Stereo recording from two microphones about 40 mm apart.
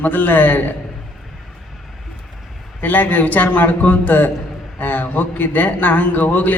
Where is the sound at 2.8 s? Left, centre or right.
Left.